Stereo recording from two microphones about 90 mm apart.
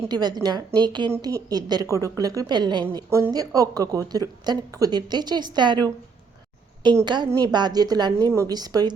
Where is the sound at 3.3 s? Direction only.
45° right (ahead or behind).